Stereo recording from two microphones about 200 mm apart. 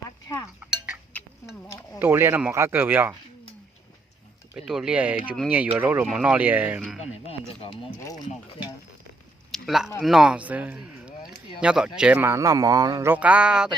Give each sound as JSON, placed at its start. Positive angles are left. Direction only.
{"t": 0.6, "sound": "chink", "side_deg": -5}
{"t": 2.0, "sound": "speech", "side_deg": -10}
{"t": 4.5, "sound": "speech", "side_deg": 0}
{"t": 7.0, "sound": "speech", "side_deg": 30}
{"t": 9.5, "sound": "a sound", "side_deg": 0}
{"t": 10.0, "sound": "speech", "side_deg": 0}